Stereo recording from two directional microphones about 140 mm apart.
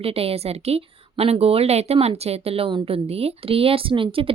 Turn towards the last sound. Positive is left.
turn(degrees=-40)  # may be behind; listen again after turning